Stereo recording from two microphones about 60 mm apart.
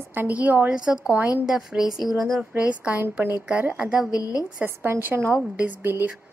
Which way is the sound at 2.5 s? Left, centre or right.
Right.